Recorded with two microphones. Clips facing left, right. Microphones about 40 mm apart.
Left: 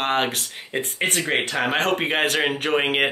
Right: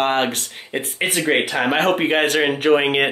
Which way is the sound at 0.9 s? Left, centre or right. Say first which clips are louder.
Right 4 dB; centre.